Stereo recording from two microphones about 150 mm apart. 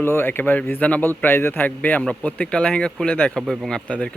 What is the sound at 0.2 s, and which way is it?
Speech, 15° left (ahead or behind).